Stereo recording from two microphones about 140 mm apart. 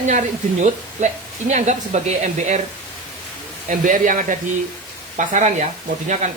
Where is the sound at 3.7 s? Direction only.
70° right (ahead or behind).